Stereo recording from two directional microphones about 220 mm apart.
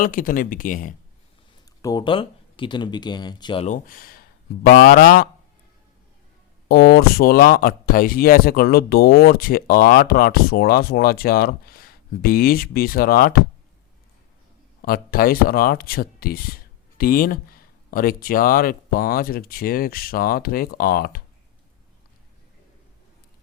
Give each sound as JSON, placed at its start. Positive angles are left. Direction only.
{"t": 0.0, "sound": "speech", "side_deg": 40}
{"t": 1.8, "sound": "speech", "side_deg": 15}
{"t": 3.8, "sound": "speech", "side_deg": 40}
{"t": 6.7, "sound": "speech", "side_deg": 45}
{"t": 14.8, "sound": "speech", "side_deg": 40}